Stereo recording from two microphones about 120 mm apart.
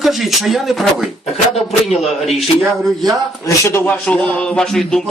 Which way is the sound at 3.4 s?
25° left (ahead or behind).